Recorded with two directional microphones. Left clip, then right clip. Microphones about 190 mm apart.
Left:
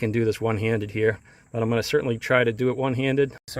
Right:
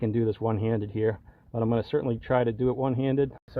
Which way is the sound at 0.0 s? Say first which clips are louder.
Left 3 dB; 15° left (ahead or behind).